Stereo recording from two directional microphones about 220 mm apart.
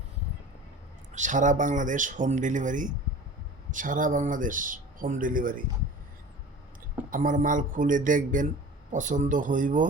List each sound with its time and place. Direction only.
1.1 s speech: 35° right (ahead or behind)
7.1 s speech: 35° right (ahead or behind)